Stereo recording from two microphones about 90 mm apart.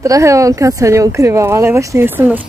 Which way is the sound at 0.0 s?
35° right (ahead or behind).